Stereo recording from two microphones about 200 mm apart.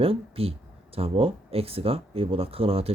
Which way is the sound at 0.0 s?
30° right (ahead or behind).